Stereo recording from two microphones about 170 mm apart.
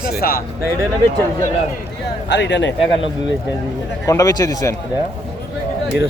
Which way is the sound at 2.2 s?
90° left.